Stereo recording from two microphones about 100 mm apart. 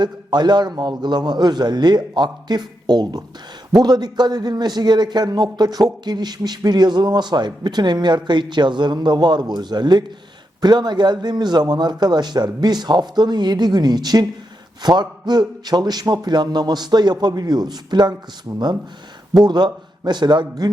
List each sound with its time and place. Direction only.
0.0 s a man's voice: 45° right (ahead or behind)